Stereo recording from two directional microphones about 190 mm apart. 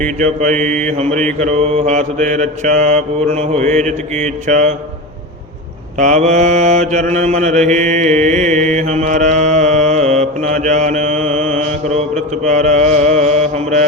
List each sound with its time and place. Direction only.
0.0 s mantra: 40° right (ahead or behind)
6.0 s mantra: 40° right (ahead or behind)